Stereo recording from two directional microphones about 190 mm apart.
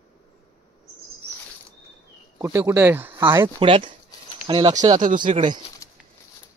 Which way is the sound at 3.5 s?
25° right (ahead or behind).